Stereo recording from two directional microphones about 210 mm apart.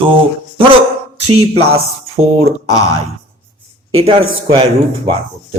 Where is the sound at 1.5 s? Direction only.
30° right (ahead or behind).